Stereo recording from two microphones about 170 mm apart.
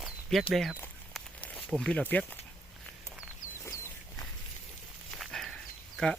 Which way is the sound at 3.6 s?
15° left (ahead or behind).